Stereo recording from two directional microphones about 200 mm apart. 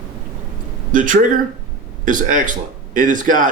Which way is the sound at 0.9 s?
40° right (ahead or behind).